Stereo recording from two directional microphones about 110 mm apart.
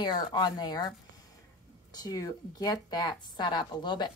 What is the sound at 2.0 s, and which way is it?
A woman's voice, 35° left (ahead or behind).